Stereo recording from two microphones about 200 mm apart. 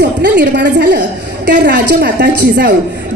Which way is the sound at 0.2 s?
60° right (ahead or behind).